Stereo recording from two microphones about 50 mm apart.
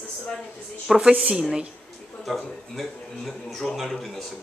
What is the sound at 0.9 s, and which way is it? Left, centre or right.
Speech, centre.